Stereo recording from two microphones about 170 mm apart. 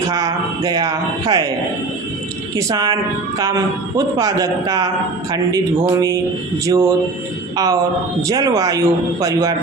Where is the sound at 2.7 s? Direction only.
20° right (ahead or behind).